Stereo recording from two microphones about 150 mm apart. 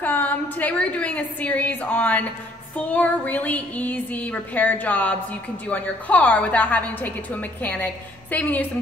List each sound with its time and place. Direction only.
0.0 s a woman's voice: 10° left (ahead or behind)